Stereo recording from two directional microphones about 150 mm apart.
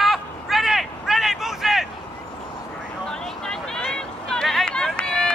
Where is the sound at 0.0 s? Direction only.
Centre (ahead or behind).